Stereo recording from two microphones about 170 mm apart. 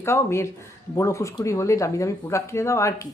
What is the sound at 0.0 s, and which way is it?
A woman's voice, 15° left (ahead or behind).